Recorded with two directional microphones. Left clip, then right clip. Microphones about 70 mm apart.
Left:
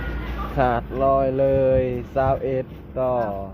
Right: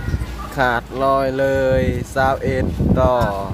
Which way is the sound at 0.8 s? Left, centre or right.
Right.